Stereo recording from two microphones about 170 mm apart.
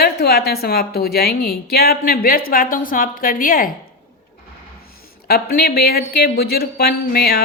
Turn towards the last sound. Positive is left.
turn(degrees=65)  # may be behind; listen again after turning